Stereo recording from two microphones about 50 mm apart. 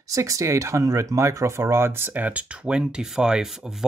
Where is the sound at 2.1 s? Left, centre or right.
Right; by 3.8 s centre.